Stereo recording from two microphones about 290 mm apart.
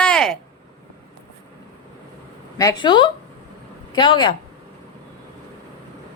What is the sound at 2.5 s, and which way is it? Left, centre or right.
A woman's voice, centre.